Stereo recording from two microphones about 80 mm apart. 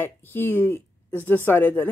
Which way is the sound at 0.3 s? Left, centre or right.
Left.